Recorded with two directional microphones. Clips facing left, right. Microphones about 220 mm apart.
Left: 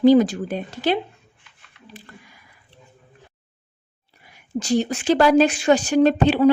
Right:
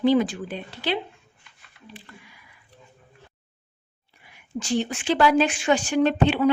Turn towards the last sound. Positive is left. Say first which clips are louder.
# left 4 dB
turn(degrees=40)  # may be behind; listen again after turning